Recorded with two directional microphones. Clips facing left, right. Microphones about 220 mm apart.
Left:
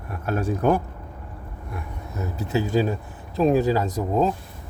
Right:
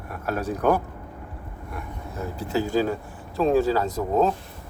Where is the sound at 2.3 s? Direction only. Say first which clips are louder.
Left 1 dB; 20° left (ahead or behind).